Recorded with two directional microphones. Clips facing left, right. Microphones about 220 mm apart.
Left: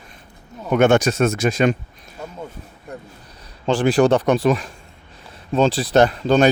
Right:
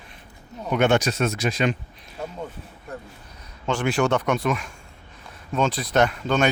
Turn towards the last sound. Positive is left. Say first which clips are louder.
# left 6 dB
turn(degrees=35)  # may be behind; listen again after turning